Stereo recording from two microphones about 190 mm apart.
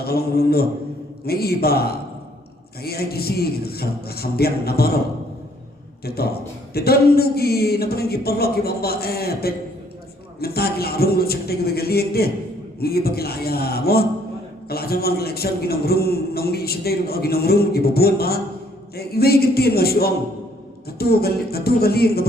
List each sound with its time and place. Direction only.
0.0 s a man's voice: 55° left (ahead or behind)
6.1 s a man's voice: 55° left (ahead or behind)